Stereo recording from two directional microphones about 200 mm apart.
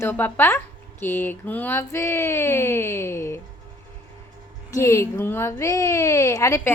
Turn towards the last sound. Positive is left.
turn(degrees=15)  # may be behind; listen again after turning